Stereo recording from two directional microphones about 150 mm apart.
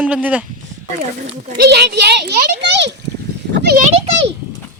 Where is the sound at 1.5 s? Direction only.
90° right.